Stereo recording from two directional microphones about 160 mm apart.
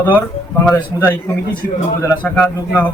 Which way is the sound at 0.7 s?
15° left (ahead or behind).